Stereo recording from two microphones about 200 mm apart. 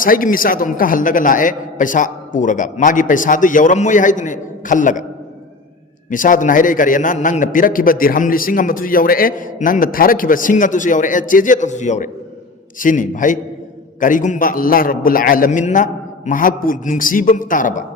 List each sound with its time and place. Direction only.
0.0 s a man's voice: 45° left (ahead or behind)
6.1 s a man's voice: 40° left (ahead or behind)